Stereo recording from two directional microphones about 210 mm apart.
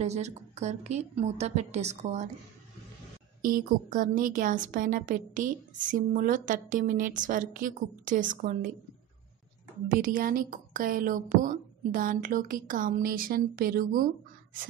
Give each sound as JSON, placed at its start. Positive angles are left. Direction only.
{"t": 0.0, "sound": "speech", "side_deg": -30}
{"t": 3.4, "sound": "speech", "side_deg": -40}
{"t": 9.8, "sound": "speech", "side_deg": -40}